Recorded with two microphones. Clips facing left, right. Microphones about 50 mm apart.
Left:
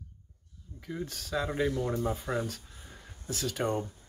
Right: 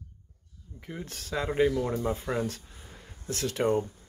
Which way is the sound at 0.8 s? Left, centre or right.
Right.